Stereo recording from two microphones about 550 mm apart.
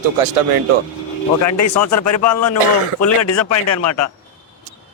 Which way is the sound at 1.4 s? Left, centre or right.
Left.